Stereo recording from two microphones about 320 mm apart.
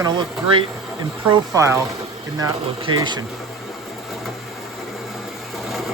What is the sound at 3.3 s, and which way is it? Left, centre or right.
Sewing machine, centre.